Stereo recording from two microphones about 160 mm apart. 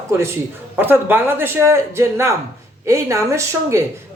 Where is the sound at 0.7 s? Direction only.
10° right (ahead or behind).